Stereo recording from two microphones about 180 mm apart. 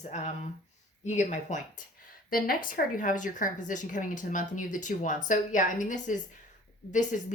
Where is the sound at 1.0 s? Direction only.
40° left (ahead or behind).